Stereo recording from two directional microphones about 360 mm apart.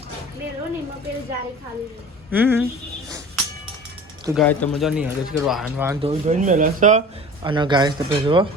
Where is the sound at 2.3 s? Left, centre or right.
Centre.